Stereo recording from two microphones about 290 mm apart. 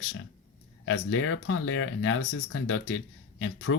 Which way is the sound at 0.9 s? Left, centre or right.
Left.